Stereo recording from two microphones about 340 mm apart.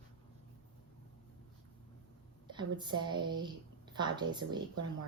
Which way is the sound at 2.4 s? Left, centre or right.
Centre.